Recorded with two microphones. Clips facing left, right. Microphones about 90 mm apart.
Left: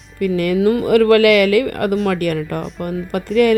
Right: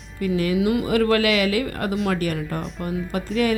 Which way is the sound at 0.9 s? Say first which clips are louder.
Left 10 dB; 65° left (ahead or behind).